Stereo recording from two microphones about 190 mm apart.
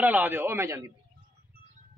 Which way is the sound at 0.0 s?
10° right (ahead or behind).